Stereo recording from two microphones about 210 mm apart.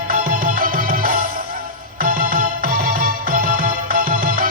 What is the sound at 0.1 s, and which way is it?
Music, 40° right (ahead or behind).